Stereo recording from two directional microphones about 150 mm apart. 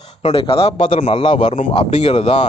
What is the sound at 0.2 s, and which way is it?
Speech, 40° left (ahead or behind).